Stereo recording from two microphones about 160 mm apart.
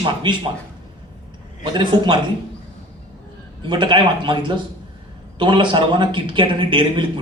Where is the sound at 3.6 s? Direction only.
30° right (ahead or behind).